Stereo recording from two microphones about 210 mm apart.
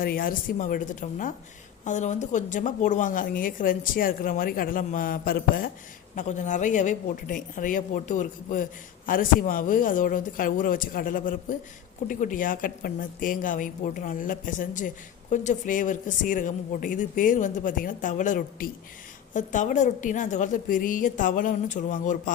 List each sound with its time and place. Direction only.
0.0 s a woman's voice: 45° left (ahead or behind)